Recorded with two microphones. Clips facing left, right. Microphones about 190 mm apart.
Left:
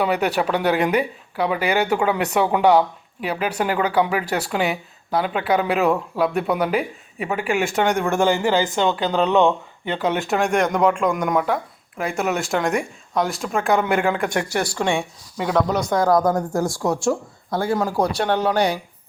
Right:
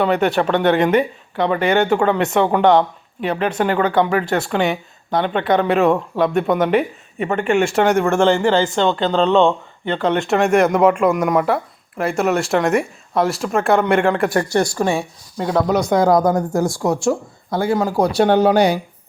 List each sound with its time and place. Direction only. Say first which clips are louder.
0.0 s speech: right 4 dB; 5° left (ahead or behind)
8.4 s a woman's voice: right 3 dB; 15° left (ahead or behind); by 15.0 s 10° right (ahead or behind)
15.9 s a woman's voice: right 3 dB; 20° right (ahead or behind)